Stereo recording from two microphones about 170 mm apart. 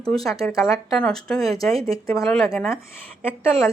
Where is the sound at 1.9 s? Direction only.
20° left (ahead or behind).